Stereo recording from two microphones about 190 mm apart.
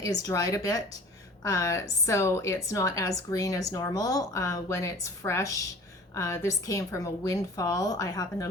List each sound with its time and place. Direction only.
0.0 s a woman's voice: 20° left (ahead or behind)